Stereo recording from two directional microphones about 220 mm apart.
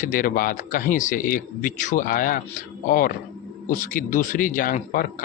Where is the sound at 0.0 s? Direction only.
40° left (ahead or behind).